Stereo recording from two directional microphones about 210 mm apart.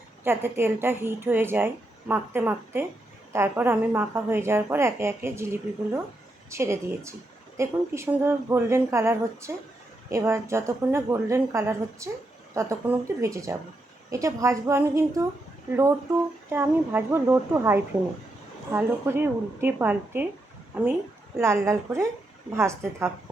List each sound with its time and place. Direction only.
0.3 s a woman's voice: 10° right (ahead or behind)
16.5 s a woman's voice: 10° right (ahead or behind)